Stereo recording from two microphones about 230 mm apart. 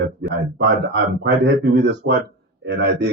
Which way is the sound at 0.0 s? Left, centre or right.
Right.